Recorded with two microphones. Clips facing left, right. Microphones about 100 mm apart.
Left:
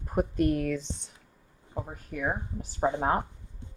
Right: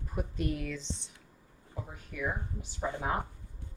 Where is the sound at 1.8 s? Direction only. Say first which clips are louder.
Left 4 dB; 45° left (ahead or behind).